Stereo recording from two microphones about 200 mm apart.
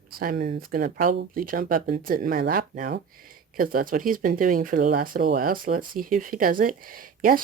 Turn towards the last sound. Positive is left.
turn(degrees=-45)  # may be behind; listen again after turning